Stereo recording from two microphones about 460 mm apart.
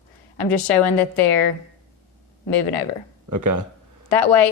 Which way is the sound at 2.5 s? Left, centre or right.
Left.